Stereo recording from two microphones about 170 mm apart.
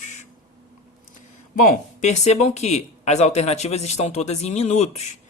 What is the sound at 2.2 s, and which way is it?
Speech, 40° left (ahead or behind).